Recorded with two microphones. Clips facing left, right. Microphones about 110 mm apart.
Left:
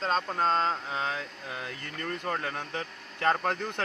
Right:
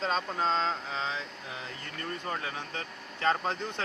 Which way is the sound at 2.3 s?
55° left (ahead or behind).